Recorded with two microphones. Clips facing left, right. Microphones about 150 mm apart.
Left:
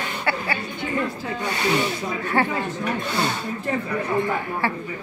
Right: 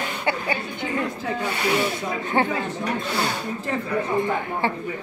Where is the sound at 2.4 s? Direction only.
20° right (ahead or behind).